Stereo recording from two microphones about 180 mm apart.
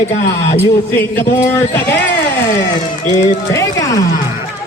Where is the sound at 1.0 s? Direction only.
10° left (ahead or behind).